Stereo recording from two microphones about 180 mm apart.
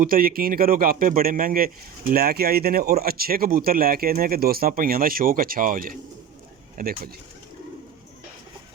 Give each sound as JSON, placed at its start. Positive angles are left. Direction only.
{"t": 0.0, "sound": "speech", "side_deg": -55}